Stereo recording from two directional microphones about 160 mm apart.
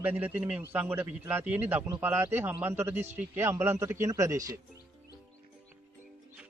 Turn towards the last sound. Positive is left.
turn(degrees=-20)  # may be behind; listen again after turning